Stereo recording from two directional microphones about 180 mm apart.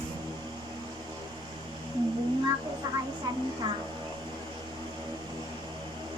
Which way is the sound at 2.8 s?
25° right (ahead or behind).